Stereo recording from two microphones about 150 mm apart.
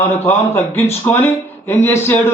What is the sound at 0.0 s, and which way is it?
Speech, 15° left (ahead or behind).